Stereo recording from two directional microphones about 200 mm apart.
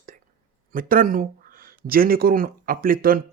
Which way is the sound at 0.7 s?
45° right (ahead or behind).